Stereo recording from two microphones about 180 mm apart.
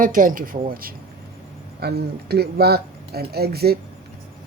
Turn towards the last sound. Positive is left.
turn(degrees=-60)  # may be behind; listen again after turning